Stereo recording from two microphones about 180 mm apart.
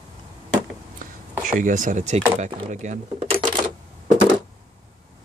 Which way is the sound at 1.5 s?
45° right (ahead or behind).